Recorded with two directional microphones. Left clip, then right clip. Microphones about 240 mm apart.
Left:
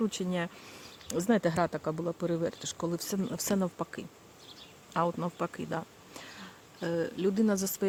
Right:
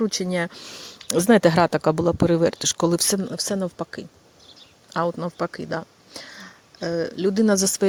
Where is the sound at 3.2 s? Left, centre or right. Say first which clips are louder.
Right 6 dB; right.